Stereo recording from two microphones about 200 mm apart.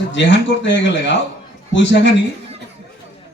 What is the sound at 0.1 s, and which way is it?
A man's voice, 65° left (ahead or behind).